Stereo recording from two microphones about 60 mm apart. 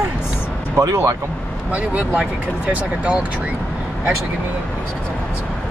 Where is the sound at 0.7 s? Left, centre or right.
Right.